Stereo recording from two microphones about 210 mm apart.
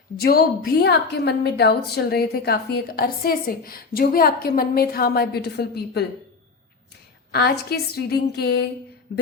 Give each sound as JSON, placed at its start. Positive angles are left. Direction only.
{"t": 0.2, "sound": "a woman's voice", "side_deg": 45}
{"t": 7.3, "sound": "a woman's voice", "side_deg": 50}